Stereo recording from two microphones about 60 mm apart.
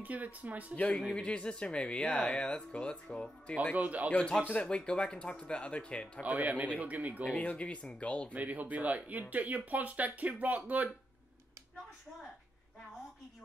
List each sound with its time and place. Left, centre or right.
0.0 s speech: right
0.7 s speech: left
3.7 s speech: right
4.5 s speech: centre
6.2 s speech: right
7.3 s speech: left
8.3 s speech: right